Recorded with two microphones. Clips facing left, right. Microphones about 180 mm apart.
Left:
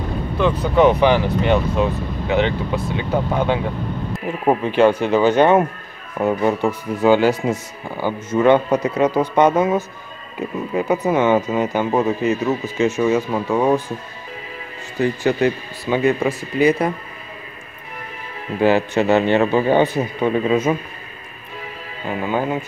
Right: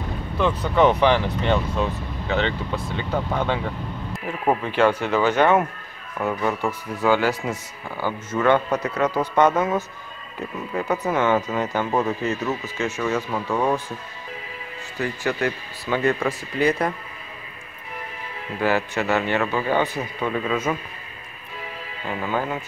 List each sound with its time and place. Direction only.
0.7 s speech: 10° left (ahead or behind)
15.0 s speech: 20° left (ahead or behind)
18.6 s speech: 25° left (ahead or behind)
22.0 s speech: 20° left (ahead or behind)